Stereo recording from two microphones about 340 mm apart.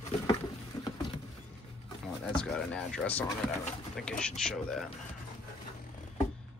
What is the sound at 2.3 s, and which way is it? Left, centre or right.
Speech, centre.